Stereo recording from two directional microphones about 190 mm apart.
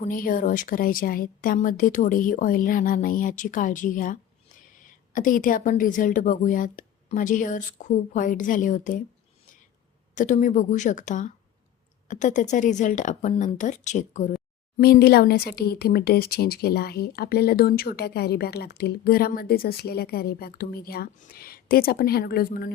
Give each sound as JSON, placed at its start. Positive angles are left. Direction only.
{"t": 0.0, "sound": "a woman's voice", "side_deg": 45}
{"t": 10.2, "sound": "a woman's voice", "side_deg": 40}
{"t": 14.8, "sound": "speech", "side_deg": 55}